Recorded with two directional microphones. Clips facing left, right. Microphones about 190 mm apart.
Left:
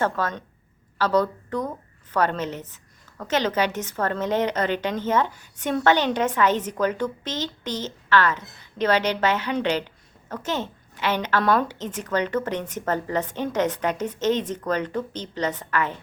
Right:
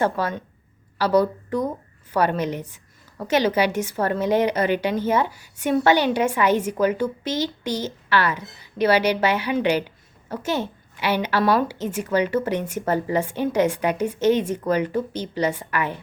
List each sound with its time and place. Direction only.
0.0 s a woman's voice: 10° right (ahead or behind)